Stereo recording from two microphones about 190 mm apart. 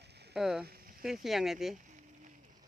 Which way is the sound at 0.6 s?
50° right (ahead or behind).